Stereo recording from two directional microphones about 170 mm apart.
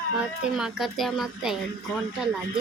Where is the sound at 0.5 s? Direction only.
Centre (ahead or behind).